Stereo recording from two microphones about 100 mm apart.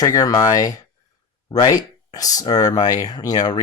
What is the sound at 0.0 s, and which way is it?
Speech, 35° left (ahead or behind).